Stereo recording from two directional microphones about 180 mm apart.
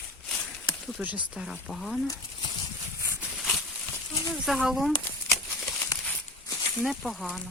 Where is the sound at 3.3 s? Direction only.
Centre (ahead or behind).